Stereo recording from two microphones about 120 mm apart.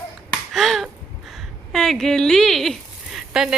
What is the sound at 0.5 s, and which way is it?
Finger snapping, centre (ahead or behind).